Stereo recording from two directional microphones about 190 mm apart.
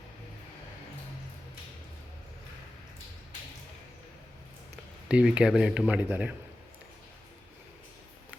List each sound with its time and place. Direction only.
5.0 s speech: 5° right (ahead or behind)